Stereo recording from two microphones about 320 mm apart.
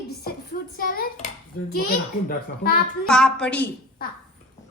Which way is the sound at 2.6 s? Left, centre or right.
Left.